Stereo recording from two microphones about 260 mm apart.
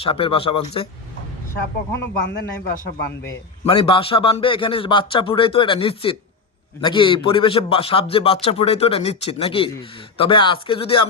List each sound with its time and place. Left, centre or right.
0.0 s a man's voice: left
2.0 s a man's voice: left
3.6 s a man's voice: centre